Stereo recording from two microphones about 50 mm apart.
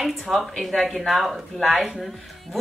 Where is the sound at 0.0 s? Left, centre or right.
Centre.